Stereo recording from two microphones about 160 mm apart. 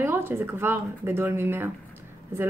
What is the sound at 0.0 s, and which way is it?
Speech, 15° right (ahead or behind).